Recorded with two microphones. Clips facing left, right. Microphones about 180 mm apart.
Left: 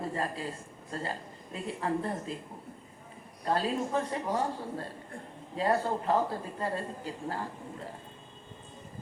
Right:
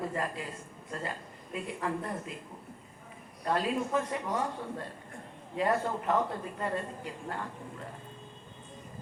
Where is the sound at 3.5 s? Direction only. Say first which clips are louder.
Even; 30° left (ahead or behind).